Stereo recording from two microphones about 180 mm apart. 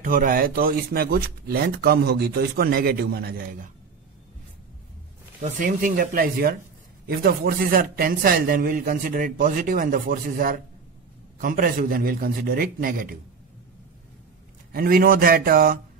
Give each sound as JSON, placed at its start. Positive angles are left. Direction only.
{"t": 0.0, "sound": "speech", "side_deg": -50}
{"t": 5.4, "sound": "a man's voice", "side_deg": -50}
{"t": 14.7, "sound": "speech", "side_deg": -55}